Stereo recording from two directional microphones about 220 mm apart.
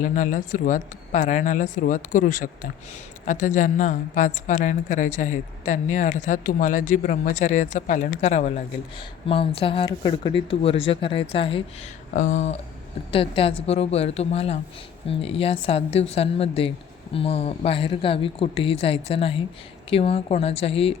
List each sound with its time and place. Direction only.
0.0 s a woman's voice: 35° left (ahead or behind)